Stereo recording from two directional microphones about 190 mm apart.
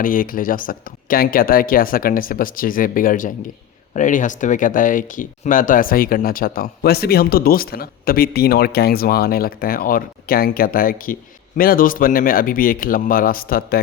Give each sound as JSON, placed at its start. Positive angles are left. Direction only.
{"t": 0.0, "sound": "speech", "side_deg": 45}